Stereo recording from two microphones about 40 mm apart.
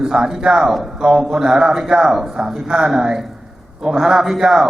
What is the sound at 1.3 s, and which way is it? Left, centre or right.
A man's voice, right.